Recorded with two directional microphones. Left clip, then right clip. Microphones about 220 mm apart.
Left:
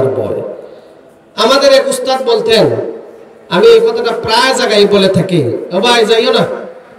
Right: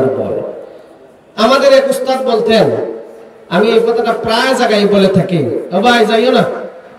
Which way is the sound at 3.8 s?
50° left (ahead or behind).